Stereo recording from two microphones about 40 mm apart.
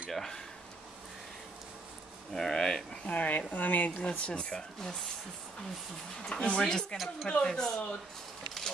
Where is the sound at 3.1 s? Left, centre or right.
Left.